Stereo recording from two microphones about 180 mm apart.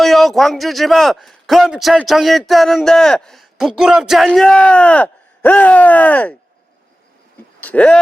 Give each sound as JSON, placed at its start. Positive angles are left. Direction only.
{"t": 0.0, "sound": "a man's voice", "side_deg": 0}
{"t": 7.6, "sound": "speech", "side_deg": 10}